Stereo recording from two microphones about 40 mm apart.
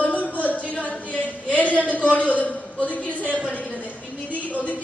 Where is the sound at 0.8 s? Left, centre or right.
Left.